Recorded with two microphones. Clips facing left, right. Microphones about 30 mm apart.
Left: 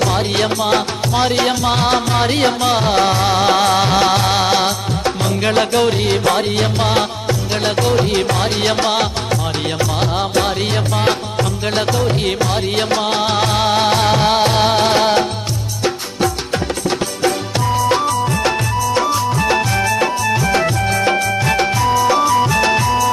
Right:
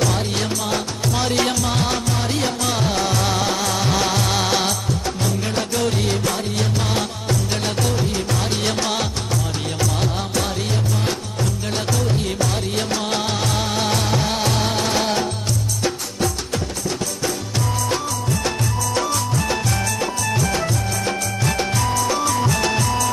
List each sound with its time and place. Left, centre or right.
0.0 s music: left
1.1 s music: left
3.4 s music: left
5.0 s music: left
5.9 s music: left
8.1 s music: left
8.6 s music: left
11.7 s music: left
17.7 s music: left
21.7 s music: left